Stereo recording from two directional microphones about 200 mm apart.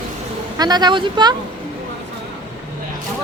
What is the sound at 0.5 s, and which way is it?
Speech, 20° right (ahead or behind).